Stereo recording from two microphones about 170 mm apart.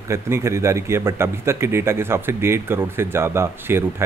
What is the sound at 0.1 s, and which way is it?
Speech, 15° right (ahead or behind).